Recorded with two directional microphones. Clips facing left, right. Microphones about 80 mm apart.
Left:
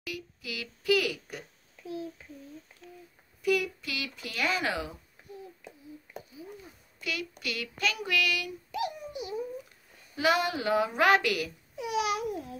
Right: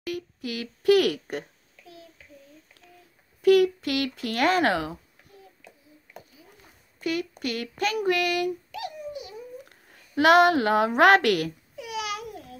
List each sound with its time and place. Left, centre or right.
0.0 s speech: right
1.8 s a child's voice: left
3.4 s speech: right
7.0 s speech: right
8.7 s a sound: left
9.7 s a woman's voice: right
11.7 s babbling: left